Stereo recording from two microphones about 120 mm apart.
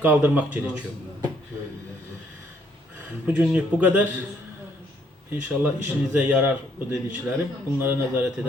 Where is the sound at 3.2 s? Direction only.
10° right (ahead or behind).